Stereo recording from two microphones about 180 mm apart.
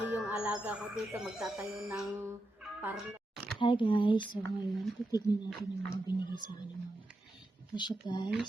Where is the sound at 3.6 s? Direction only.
25° left (ahead or behind).